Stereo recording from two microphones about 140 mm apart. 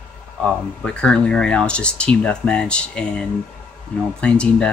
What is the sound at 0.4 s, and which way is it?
Speech, 5° left (ahead or behind).